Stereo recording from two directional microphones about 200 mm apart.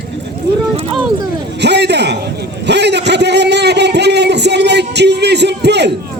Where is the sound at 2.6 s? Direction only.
55° right (ahead or behind).